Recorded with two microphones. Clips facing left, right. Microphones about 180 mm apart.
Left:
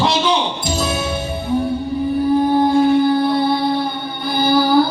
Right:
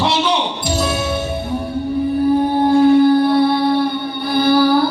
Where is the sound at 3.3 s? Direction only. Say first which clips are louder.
Right 3 dB; 65° right (ahead or behind).